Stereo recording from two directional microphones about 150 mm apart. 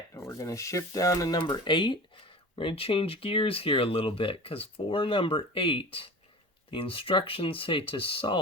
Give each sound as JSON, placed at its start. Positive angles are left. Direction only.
{"t": 0.1, "sound": "speech", "side_deg": 20}